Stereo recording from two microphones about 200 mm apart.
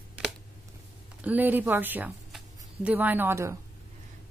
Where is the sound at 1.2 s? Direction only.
10° right (ahead or behind).